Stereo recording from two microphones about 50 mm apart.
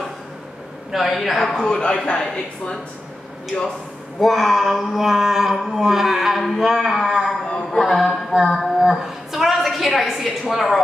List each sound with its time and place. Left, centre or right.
0.9 s speech: centre
4.2 s speech: centre
7.4 s a sound: centre
7.8 s speech: centre
8.1 s a woman's voice: centre